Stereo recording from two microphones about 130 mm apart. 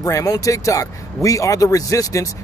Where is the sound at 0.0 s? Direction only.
25° left (ahead or behind).